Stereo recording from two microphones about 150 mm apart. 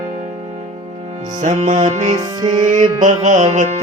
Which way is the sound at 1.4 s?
55° right (ahead or behind).